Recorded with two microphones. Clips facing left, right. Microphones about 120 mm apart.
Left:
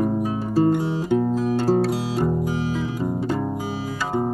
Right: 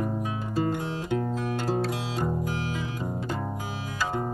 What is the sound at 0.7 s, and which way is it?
Music, 10° left (ahead or behind).